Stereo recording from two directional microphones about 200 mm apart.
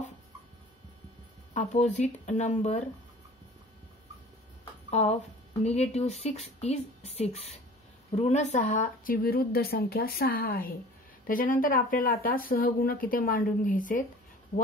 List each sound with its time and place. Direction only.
1.5 s speech: 35° left (ahead or behind)
5.0 s speech: 35° left (ahead or behind)